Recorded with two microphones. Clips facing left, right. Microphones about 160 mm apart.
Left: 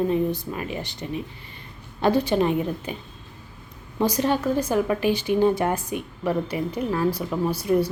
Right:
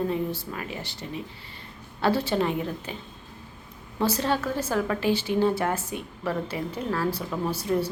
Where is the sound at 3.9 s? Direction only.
15° left (ahead or behind).